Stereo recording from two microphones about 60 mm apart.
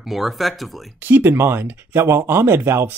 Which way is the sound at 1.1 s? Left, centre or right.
Right.